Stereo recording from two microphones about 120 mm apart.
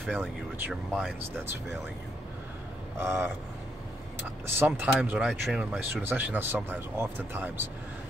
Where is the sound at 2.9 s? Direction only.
20° right (ahead or behind).